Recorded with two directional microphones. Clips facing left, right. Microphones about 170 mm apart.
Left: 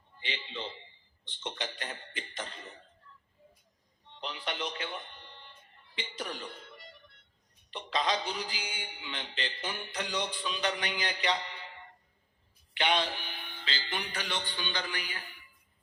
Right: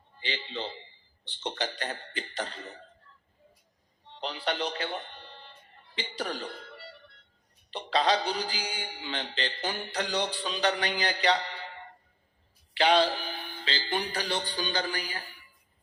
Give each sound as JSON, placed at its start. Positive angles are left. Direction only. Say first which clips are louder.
{"t": 0.2, "sound": "speech", "louder": "right 4 dB", "side_deg": -35}
{"t": 4.1, "sound": "music", "louder": "right 6 dB", "side_deg": -35}
{"t": 7.7, "sound": "speech", "louder": "right 5 dB", "side_deg": -35}